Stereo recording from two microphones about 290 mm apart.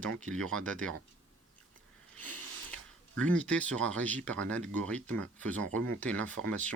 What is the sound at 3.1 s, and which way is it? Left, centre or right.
Speech, centre.